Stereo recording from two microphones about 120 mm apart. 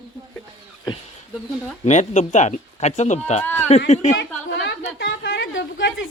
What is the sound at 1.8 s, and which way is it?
Speech, 75° left (ahead or behind).